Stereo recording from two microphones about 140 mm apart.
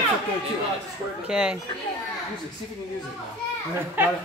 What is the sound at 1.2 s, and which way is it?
Speech, 5° right (ahead or behind).